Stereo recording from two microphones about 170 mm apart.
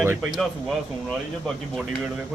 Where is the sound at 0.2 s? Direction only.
Centre (ahead or behind).